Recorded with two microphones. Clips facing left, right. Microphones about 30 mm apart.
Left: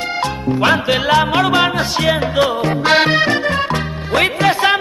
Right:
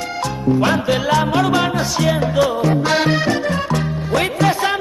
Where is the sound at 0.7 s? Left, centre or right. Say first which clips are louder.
Left 3 dB; left.